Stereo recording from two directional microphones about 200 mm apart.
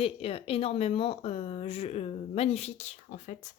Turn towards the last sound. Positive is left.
turn(degrees=35)  # may be behind; listen again after turning